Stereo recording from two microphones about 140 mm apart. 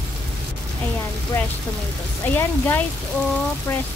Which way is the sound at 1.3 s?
15° left (ahead or behind).